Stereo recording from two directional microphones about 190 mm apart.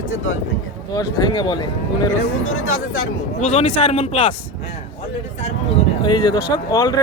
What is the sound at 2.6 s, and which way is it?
Speech, 90° left.